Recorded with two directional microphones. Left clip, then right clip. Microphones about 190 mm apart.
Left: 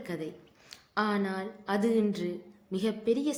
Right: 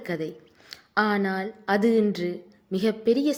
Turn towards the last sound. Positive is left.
turn(degrees=-30)  # may be behind; listen again after turning